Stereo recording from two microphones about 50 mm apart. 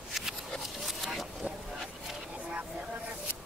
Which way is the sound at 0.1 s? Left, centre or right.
Centre.